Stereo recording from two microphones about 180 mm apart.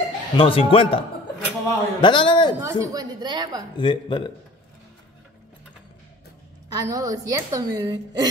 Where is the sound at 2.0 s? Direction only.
30° left (ahead or behind).